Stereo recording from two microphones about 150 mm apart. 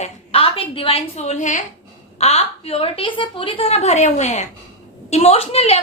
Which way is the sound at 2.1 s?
45° left (ahead or behind).